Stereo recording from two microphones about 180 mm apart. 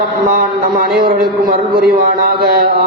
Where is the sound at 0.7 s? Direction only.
55° right (ahead or behind).